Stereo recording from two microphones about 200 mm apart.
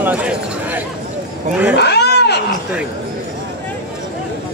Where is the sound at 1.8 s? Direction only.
55° left (ahead or behind).